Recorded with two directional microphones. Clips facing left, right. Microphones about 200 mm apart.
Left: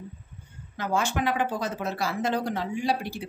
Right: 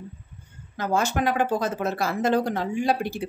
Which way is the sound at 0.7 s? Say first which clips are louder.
Right 3 dB; 40° right (ahead or behind).